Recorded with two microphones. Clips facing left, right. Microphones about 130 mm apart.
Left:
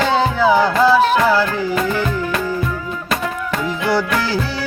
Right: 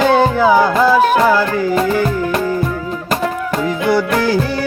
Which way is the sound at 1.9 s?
40° right (ahead or behind).